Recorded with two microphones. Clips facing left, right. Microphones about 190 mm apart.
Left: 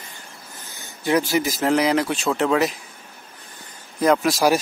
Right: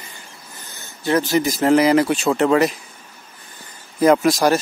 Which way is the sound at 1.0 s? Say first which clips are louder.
Right 2 dB; 10° left (ahead or behind).